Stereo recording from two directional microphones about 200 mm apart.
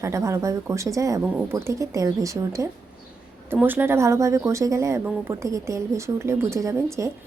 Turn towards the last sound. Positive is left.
turn(degrees=-15)  # may be behind; listen again after turning